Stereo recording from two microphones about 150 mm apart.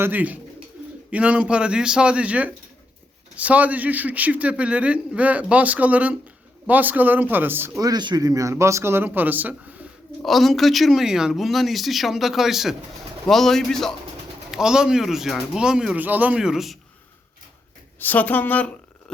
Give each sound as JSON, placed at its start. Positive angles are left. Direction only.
{"t": 0.0, "sound": "a man's voice", "side_deg": -10}
{"t": 7.8, "sound": "speech", "side_deg": -25}
{"t": 10.2, "sound": "speech", "side_deg": 0}
{"t": 18.0, "sound": "a woman's voice", "side_deg": 10}